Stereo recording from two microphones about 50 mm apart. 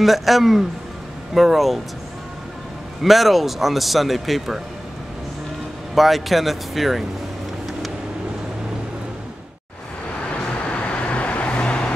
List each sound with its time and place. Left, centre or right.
0.0 s speech: centre
3.0 s speech: centre
5.9 s speech: centre
10.2 s vehicle: left